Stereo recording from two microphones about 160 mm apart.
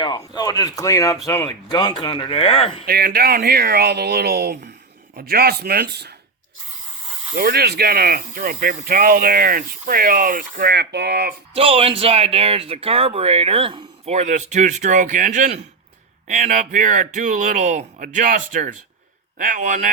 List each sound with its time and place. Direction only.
0.0 s speech: 25° left (ahead or behind)
2.8 s speech: 70° right (ahead or behind)
7.3 s speech: 75° right (ahead or behind)
11.5 s speech: 35° right (ahead or behind); by 19.9 s 50° right (ahead or behind)